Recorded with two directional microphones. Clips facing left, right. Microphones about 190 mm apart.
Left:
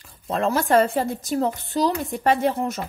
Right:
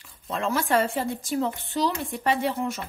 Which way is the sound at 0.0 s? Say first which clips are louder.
Left 5 dB; 40° left (ahead or behind).